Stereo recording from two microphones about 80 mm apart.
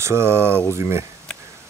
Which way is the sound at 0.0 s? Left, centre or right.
Right.